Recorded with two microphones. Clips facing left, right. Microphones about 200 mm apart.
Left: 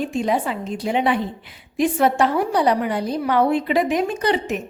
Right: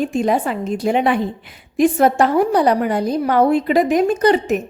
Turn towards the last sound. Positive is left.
turn(degrees=-45)  # may be behind; listen again after turning